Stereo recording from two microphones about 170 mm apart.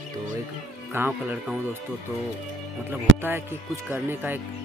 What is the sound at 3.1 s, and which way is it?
Speech, 90° right.